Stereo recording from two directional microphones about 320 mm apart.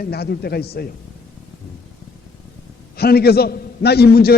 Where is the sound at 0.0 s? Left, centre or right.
Left.